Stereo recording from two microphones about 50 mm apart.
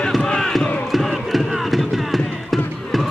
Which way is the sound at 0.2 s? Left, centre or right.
Centre.